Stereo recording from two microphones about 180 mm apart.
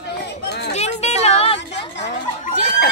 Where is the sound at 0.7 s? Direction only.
35° left (ahead or behind).